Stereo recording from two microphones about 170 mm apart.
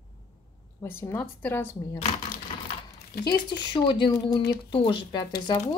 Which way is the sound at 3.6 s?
25° left (ahead or behind).